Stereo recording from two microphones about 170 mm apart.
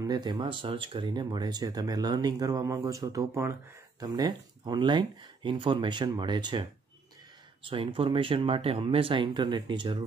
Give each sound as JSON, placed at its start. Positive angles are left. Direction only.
{"t": 0.0, "sound": "speech", "side_deg": -25}